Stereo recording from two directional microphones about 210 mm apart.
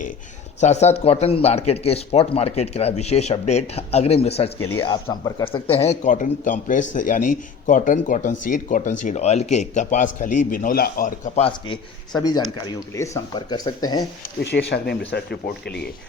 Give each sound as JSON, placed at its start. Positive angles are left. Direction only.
{"t": 0.6, "sound": "speech", "side_deg": 30}
{"t": 11.4, "sound": "speech", "side_deg": 20}
{"t": 14.4, "sound": "speech", "side_deg": 50}